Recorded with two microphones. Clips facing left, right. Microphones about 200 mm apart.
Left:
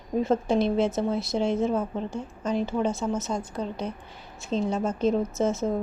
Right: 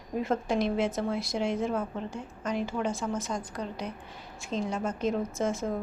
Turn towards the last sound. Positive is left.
turn(degrees=25)  # may be behind; listen again after turning